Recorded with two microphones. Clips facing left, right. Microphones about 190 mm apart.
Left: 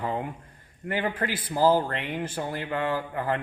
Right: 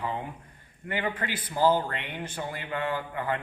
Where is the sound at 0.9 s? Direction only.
40° left (ahead or behind).